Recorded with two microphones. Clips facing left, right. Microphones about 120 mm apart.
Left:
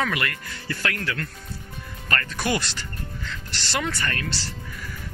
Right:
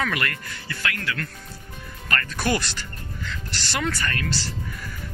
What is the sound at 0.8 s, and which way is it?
Speech, 35° left (ahead or behind).